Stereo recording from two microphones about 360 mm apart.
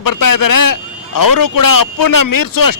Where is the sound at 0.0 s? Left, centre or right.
Left.